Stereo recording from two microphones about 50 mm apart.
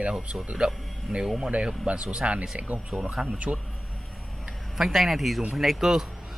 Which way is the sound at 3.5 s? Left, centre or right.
Right.